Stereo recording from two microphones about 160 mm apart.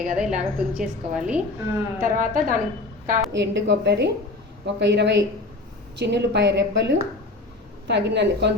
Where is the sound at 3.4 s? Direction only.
90° right.